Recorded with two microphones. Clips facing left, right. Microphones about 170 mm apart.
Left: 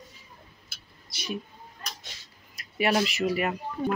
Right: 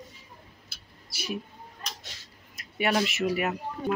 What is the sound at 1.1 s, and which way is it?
Speech, 5° right (ahead or behind).